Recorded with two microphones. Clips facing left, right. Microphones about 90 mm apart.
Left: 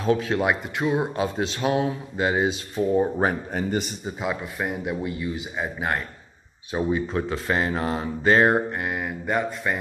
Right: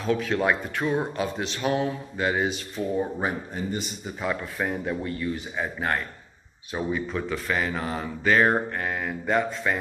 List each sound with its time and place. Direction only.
0.0 s speech: 30° left (ahead or behind)
0.4 s speech: 15° left (ahead or behind)
3.2 s speech: 55° left (ahead or behind)
4.0 s speech: 15° left (ahead or behind)
6.7 s speech: 30° left (ahead or behind)
8.5 s speech: 10° left (ahead or behind)